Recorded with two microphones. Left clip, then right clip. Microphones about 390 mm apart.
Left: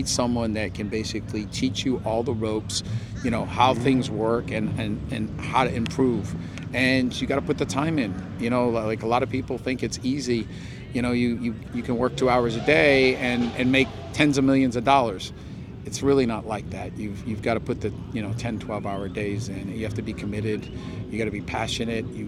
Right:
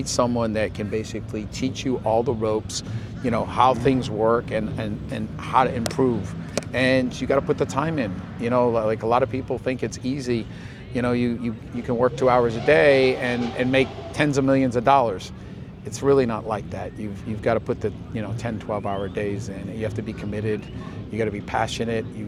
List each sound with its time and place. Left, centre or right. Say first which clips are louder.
0.0 s speech: right 3 dB; centre